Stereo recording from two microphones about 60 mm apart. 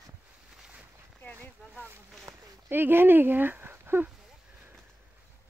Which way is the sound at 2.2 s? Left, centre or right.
Right.